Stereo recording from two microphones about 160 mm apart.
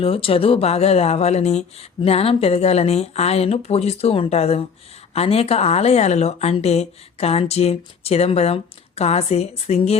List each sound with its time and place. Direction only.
0.0 s speech: 35° left (ahead or behind)